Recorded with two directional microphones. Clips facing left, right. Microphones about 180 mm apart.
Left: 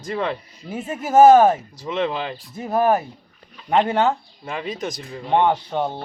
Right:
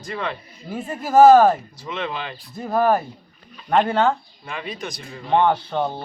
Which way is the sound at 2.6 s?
10° left (ahead or behind).